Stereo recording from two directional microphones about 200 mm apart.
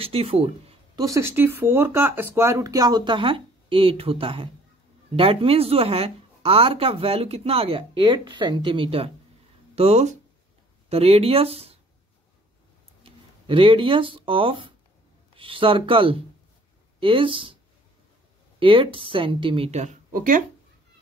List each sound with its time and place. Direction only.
0.0 s speech: 30° right (ahead or behind)
1.0 s a woman's voice: 15° right (ahead or behind); by 11.8 s 30° right (ahead or behind)
13.0 s a woman's voice: 25° right (ahead or behind)
18.6 s a woman's voice: 25° right (ahead or behind); by 20.4 s 45° right (ahead or behind)